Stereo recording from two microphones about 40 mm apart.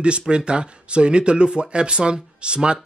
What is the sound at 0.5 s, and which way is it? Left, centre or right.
Speech, right.